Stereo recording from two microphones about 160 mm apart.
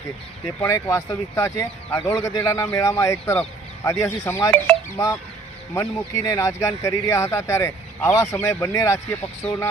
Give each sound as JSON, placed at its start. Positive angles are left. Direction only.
{"t": 0.6, "sound": "speech", "side_deg": 20}